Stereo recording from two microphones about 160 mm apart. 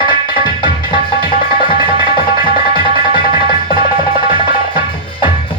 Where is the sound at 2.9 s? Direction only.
30° right (ahead or behind).